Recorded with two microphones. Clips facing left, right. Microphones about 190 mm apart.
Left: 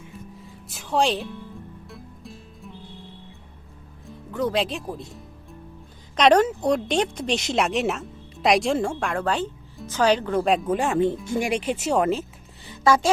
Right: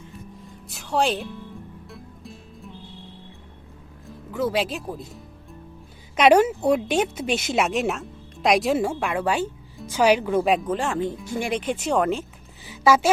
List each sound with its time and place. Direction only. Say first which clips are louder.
0.4 s speech: even; centre (ahead or behind)
1.9 s music: even; centre (ahead or behind)
4.0 s a woman's voice: even; 5° right (ahead or behind)
10.7 s speech: left 3 dB; 15° left (ahead or behind)
12.6 s a sound: right 1 dB; 5° right (ahead or behind)